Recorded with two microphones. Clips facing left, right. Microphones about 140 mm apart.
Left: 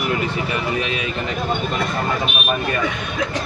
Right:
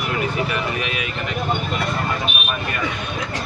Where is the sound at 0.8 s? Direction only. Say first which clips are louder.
Left 2 dB; 30° left (ahead or behind).